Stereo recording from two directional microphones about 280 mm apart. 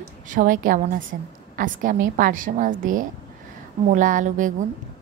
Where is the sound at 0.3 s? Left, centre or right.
Right.